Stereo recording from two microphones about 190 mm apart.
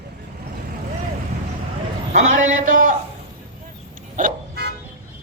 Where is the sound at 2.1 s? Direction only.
45° right (ahead or behind).